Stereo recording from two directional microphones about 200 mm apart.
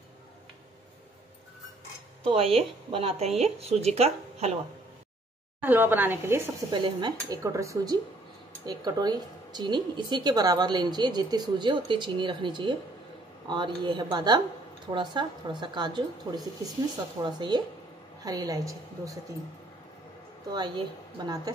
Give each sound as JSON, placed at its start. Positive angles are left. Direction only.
{"t": 2.2, "sound": "speech", "side_deg": -30}
{"t": 5.6, "sound": "a woman's voice", "side_deg": -10}
{"t": 6.7, "sound": "a woman's voice", "side_deg": -20}
{"t": 20.5, "sound": "a woman's voice", "side_deg": -20}